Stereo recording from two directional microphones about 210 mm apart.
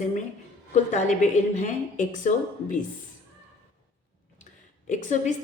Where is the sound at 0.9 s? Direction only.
35° left (ahead or behind).